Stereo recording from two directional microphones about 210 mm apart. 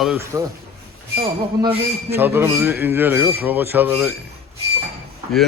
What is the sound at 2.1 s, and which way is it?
A man's voice, 10° right (ahead or behind).